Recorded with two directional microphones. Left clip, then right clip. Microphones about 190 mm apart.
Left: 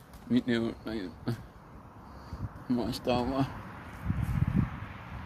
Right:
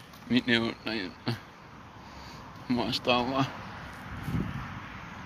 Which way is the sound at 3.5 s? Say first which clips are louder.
Right 3 dB; 50° right (ahead or behind).